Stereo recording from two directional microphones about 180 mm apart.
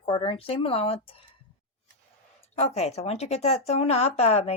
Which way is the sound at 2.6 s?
35° left (ahead or behind).